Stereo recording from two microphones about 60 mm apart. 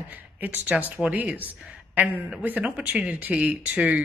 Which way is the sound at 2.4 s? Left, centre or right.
Right.